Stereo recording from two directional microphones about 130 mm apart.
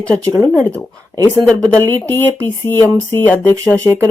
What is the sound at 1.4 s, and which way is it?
Speech, 10° left (ahead or behind).